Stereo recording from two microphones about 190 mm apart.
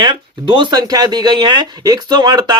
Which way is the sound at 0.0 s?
25° right (ahead or behind).